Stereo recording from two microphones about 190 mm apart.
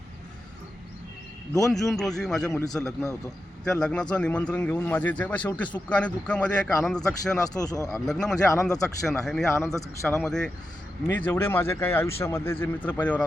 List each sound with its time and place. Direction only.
1.7 s a man's voice: centre (ahead or behind)
7.4 s speech: 20° left (ahead or behind)
7.9 s a man's voice: centre (ahead or behind)
9.7 s speech: 15° left (ahead or behind)
10.2 s a man's voice: 5° left (ahead or behind)